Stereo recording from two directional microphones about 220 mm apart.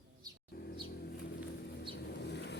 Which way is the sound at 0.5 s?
45° left (ahead or behind).